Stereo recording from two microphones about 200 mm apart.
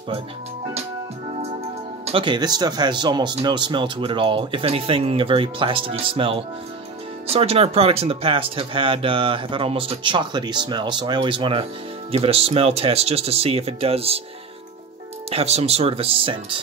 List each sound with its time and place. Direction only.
2.0 s speech: 25° right (ahead or behind)
15.2 s speech: 30° right (ahead or behind)